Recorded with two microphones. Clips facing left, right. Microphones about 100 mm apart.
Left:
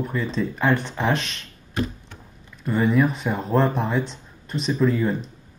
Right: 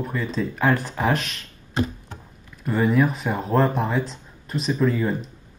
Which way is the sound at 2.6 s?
Centre (ahead or behind).